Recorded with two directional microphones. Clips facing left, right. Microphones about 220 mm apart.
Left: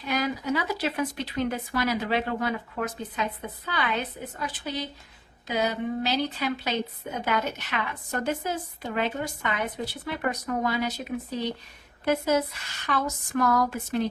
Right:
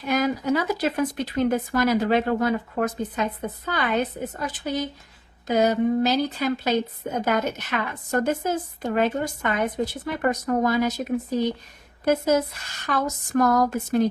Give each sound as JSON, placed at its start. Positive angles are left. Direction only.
{"t": 0.0, "sound": "a woman's voice", "side_deg": -45}